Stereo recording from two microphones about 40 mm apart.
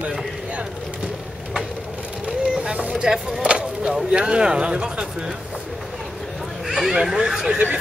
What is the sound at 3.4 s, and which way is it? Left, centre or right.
Vehicle, right.